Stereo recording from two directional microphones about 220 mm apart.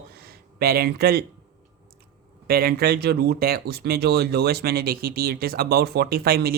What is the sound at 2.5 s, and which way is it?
Speech, 45° right (ahead or behind).